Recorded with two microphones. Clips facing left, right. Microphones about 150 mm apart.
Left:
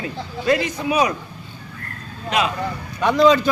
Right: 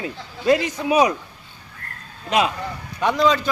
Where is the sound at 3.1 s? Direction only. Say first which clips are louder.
Left 6 dB; 5° left (ahead or behind).